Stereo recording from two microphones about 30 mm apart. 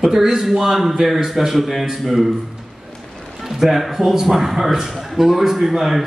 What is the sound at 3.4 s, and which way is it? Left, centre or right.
A man's voice, centre.